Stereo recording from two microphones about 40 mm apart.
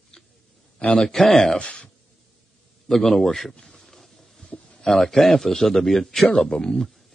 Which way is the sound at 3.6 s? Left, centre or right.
Centre.